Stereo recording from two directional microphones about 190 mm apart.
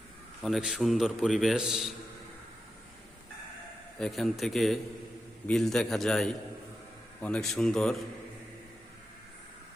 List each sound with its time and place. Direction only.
0.4 s a man's voice: centre (ahead or behind)
3.9 s a man's voice: centre (ahead or behind)